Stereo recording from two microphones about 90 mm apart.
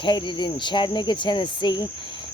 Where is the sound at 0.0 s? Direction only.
65° left (ahead or behind).